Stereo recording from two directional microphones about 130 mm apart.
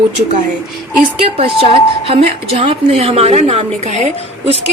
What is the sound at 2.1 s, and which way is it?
A woman's voice, 50° right (ahead or behind).